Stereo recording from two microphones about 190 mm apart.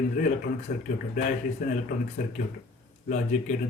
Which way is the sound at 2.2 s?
45° left (ahead or behind).